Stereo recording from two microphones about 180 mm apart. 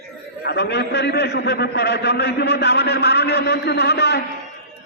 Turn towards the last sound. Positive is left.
turn(degrees=70)  # may be behind; listen again after turning